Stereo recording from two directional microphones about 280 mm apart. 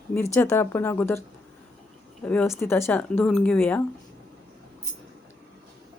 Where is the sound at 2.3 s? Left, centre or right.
Centre.